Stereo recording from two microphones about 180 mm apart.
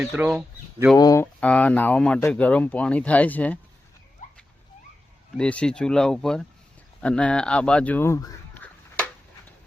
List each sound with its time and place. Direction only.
0.0 s speech: 5° right (ahead or behind)
0.9 s speech: 20° left (ahead or behind)
1.4 s speech: 5° left (ahead or behind)
4.2 s a sound: 45° left (ahead or behind)
5.4 s speech: 5° left (ahead or behind)